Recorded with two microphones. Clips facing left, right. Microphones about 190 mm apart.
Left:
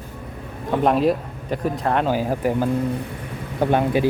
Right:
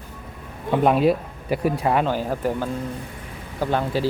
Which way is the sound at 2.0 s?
10° left (ahead or behind).